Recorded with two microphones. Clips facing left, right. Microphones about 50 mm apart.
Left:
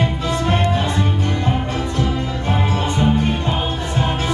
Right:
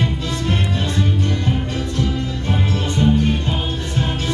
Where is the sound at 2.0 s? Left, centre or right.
Centre.